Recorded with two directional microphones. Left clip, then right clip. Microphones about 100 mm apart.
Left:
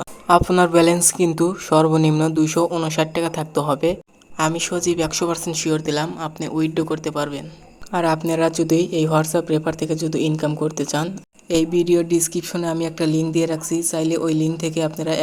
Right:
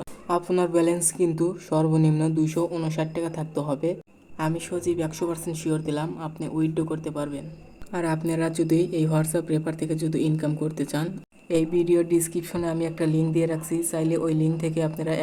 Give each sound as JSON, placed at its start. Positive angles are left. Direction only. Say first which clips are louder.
{"t": 0.3, "sound": "speech", "louder": "left 9 dB", "side_deg": 40}
{"t": 7.9, "sound": "speech", "louder": "left 7 dB", "side_deg": 15}
{"t": 11.4, "sound": "a woman's voice", "louder": "left 4 dB", "side_deg": 30}